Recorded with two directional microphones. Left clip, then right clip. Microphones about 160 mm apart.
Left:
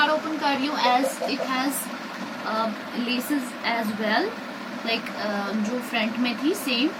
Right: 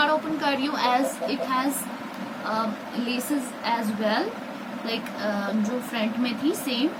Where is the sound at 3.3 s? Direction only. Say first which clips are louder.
Right 2 dB; 20° right (ahead or behind).